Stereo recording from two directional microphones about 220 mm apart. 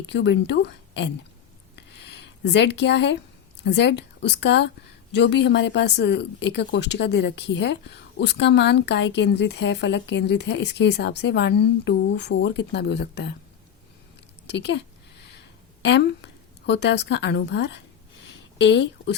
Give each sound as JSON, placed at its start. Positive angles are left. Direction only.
{"t": 0.1, "sound": "a woman's voice", "side_deg": 55}
{"t": 1.9, "sound": "a sound", "side_deg": 50}
{"t": 3.6, "sound": "a woman's voice", "side_deg": 50}
{"t": 14.4, "sound": "a woman's voice", "side_deg": 50}